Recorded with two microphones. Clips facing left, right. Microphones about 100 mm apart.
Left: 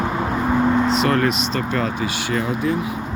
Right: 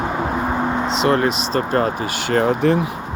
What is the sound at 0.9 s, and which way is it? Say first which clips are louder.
Speech: right 1 dB; 25° right (ahead or behind).